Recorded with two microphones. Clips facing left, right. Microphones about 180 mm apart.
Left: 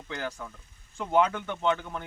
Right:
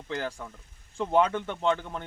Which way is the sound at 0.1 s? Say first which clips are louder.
Right 2 dB; 30° right (ahead or behind).